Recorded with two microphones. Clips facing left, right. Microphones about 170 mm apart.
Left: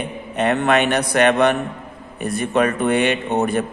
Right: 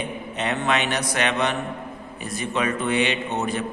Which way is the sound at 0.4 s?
55° left (ahead or behind).